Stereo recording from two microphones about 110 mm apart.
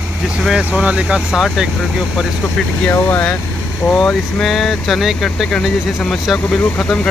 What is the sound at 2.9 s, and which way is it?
Speech, 20° left (ahead or behind).